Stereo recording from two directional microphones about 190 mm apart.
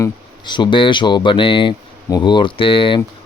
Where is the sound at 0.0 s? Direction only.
25° left (ahead or behind).